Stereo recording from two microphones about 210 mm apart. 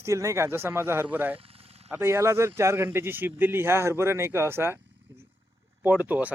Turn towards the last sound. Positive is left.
turn(degrees=-5)  # may be behind; listen again after turning